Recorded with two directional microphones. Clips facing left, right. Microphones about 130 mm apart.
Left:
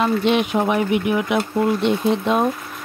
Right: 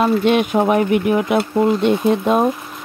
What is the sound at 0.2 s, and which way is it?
Speech, 50° right (ahead or behind).